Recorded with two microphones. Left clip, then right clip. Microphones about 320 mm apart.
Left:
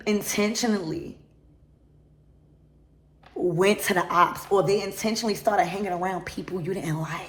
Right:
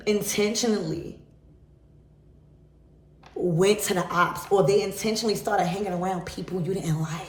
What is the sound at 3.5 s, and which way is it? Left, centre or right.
Speech, centre.